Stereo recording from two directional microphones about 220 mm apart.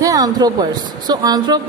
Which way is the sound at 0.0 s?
15° right (ahead or behind).